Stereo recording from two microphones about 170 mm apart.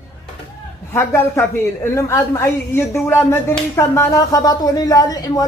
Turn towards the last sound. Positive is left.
turn(degrees=20)  # may be behind; listen again after turning